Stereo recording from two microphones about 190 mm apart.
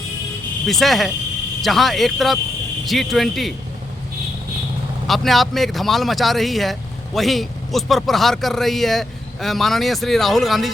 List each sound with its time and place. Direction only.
0.7 s speech: centre (ahead or behind)
5.0 s speech: centre (ahead or behind)